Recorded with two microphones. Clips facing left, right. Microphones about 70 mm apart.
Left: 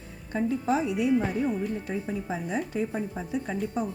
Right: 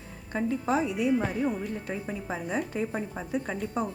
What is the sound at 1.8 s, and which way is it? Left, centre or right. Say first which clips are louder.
Speech: left 2 dB; right.